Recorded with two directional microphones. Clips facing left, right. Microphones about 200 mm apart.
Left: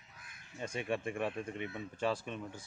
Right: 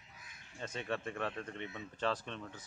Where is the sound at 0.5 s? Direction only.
10° left (ahead or behind).